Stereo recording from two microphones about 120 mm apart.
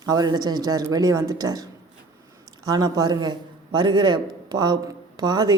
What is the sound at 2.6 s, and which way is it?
A man's voice, 35° right (ahead or behind).